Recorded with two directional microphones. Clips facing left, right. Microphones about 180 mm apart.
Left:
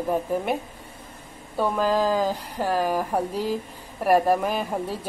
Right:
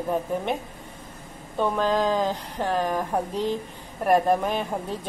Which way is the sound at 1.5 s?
5° left (ahead or behind).